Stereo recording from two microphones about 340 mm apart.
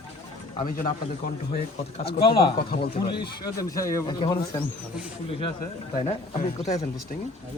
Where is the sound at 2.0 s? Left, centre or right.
Centre.